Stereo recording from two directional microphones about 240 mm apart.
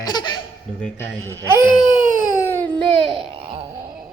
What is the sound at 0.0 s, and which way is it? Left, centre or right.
Baby laughter, centre.